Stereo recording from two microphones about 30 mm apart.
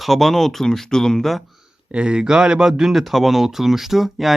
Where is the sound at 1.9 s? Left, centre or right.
Right.